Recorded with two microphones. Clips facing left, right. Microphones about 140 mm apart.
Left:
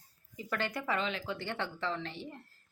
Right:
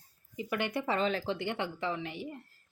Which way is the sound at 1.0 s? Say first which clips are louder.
Right 5 dB; 40° right (ahead or behind).